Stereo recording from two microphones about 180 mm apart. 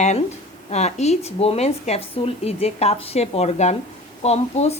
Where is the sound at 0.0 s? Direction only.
40° left (ahead or behind).